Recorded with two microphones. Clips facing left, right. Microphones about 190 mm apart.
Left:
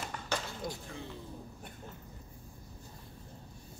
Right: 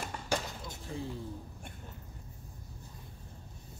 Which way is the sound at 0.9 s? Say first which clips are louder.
Right 5 dB; 30° right (ahead or behind).